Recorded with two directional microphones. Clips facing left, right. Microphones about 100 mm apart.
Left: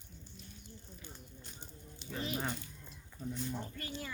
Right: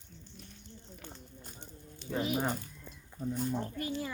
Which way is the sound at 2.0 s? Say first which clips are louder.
Right 8 dB; 15° left (ahead or behind).